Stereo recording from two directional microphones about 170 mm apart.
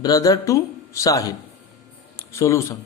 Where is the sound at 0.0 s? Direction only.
20° left (ahead or behind).